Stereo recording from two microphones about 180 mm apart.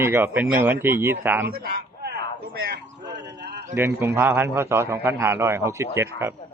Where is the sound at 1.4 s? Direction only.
60° right (ahead or behind).